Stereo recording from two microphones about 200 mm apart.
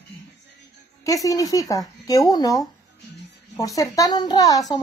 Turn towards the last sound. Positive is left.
turn(degrees=20)  # may be behind; listen again after turning